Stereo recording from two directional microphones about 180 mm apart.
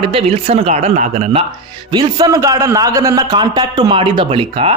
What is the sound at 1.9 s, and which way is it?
Speech, 20° right (ahead or behind).